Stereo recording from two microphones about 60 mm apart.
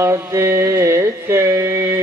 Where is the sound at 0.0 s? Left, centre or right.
Right.